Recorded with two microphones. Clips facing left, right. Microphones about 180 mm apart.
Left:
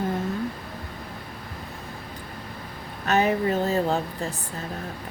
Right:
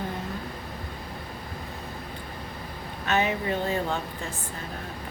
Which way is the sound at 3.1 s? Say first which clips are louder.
Left 4 dB; 40° left (ahead or behind).